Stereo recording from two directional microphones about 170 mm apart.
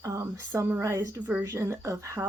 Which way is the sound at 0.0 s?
15° right (ahead or behind).